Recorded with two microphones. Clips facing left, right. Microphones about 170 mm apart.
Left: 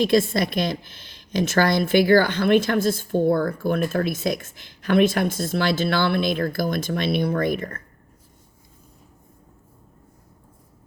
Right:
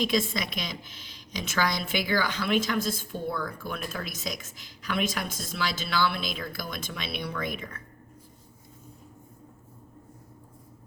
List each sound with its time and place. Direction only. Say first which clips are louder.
0.2 s a woman's voice: left 9 dB; 50° left (ahead or behind)